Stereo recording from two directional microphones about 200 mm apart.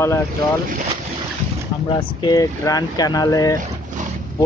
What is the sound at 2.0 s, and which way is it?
Speech, 20° left (ahead or behind).